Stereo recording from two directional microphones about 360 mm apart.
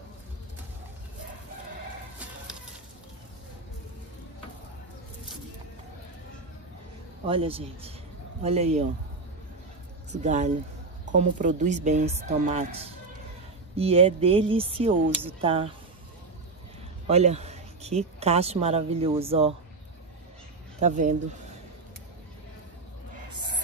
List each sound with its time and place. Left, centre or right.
7.2 s speech: centre
10.2 s speech: centre
13.7 s speech: centre
17.1 s speech: centre
20.8 s speech: right